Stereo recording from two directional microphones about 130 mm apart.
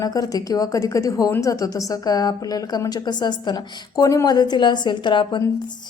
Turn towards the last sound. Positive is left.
turn(degrees=35)  # may be behind; listen again after turning